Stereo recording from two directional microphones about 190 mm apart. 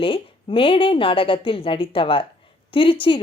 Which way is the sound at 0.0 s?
30° left (ahead or behind).